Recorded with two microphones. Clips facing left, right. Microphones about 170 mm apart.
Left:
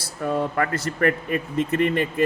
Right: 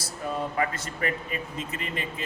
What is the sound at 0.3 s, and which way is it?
Speech, 65° left (ahead or behind).